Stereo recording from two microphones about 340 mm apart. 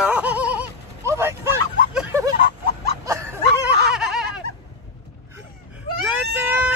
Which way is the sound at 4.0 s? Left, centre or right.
Centre.